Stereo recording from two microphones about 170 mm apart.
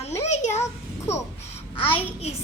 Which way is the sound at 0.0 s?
40° left (ahead or behind).